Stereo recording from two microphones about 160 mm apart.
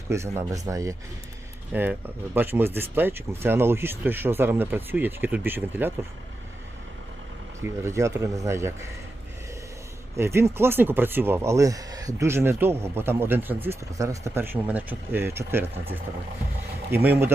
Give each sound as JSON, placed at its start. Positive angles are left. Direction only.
{"t": 0.1, "sound": "speech", "side_deg": -15}
{"t": 7.6, "sound": "speech", "side_deg": -15}
{"t": 10.2, "sound": "speech", "side_deg": -15}
{"t": 16.9, "sound": "speech", "side_deg": -10}